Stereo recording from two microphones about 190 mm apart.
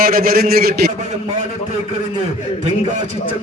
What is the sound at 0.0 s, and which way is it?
Speech, 50° right (ahead or behind).